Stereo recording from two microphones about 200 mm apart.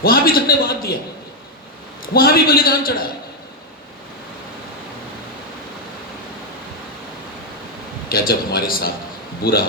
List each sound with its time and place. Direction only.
0.0 s a man's voice: 50° left (ahead or behind)
2.1 s a man's voice: 50° left (ahead or behind)
8.1 s a man's voice: 45° left (ahead or behind)